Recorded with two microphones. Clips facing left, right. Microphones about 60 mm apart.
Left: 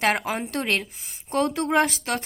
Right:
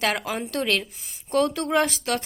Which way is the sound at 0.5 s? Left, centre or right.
Left.